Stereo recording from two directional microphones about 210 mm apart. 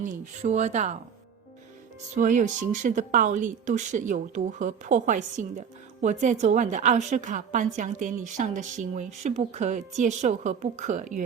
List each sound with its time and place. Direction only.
0.0 s speech: 35° right (ahead or behind)
2.1 s speech: 40° right (ahead or behind)